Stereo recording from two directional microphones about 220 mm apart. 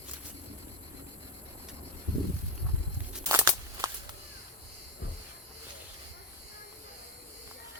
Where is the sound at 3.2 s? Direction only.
15° right (ahead or behind).